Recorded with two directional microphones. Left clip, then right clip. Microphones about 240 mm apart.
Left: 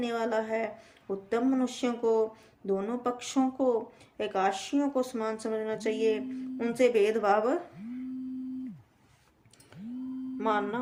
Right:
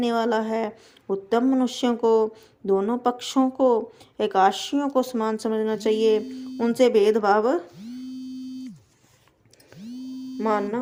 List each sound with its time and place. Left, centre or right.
0.0 s speech: right
10.3 s speech: centre